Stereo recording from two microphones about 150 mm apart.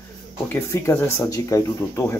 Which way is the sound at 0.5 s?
15° left (ahead or behind).